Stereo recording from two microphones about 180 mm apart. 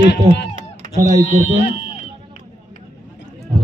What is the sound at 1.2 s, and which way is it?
Speech, 45° right (ahead or behind).